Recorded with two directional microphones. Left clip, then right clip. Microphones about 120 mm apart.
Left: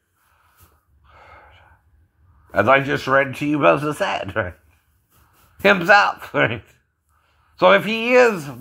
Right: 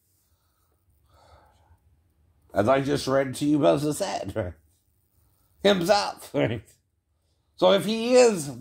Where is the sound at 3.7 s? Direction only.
25° right (ahead or behind).